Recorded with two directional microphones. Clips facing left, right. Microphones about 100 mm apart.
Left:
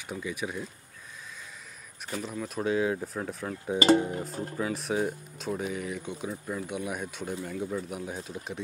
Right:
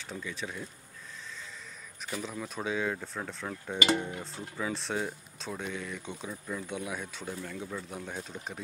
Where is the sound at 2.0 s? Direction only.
Centre (ahead or behind).